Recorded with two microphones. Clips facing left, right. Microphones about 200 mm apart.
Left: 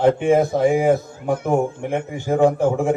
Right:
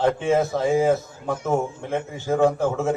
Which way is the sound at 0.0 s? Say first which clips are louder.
Left 4 dB; 15° left (ahead or behind).